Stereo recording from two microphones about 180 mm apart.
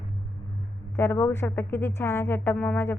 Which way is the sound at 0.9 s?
15° left (ahead or behind).